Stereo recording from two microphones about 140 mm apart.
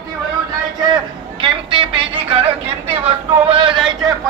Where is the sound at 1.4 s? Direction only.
40° right (ahead or behind).